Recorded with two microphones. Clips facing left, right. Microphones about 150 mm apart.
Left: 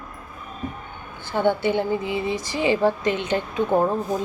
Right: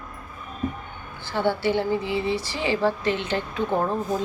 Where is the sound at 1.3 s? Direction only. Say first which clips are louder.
Left 2 dB; 20° left (ahead or behind).